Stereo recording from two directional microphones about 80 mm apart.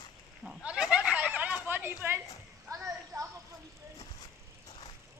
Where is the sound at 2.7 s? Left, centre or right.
Right.